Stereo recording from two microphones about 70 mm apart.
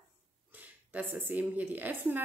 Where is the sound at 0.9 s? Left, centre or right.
Right.